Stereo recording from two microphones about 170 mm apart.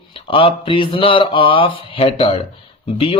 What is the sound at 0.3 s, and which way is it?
Speech, 30° left (ahead or behind).